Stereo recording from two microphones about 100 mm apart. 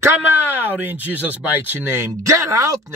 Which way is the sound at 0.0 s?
25° right (ahead or behind).